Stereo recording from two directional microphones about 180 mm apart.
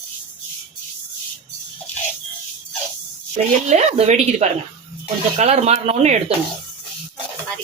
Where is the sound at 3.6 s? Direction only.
35° right (ahead or behind).